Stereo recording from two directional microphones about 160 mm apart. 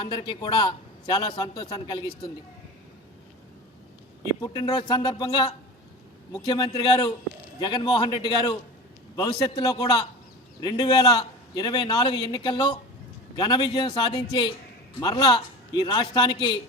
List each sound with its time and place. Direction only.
0.0 s a man's voice: 30° left (ahead or behind)
4.4 s a man's voice: 25° left (ahead or behind)